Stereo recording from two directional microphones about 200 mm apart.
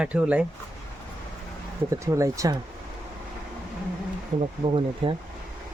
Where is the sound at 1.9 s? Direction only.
15° right (ahead or behind).